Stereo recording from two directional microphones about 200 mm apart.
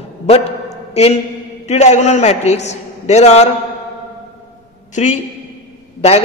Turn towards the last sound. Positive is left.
turn(degrees=30)  # may be behind; listen again after turning